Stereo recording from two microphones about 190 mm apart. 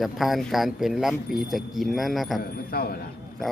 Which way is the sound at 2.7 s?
55° left (ahead or behind).